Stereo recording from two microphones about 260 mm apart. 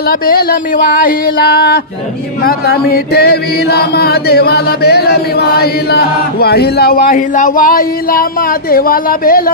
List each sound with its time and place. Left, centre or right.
0.1 s chant: left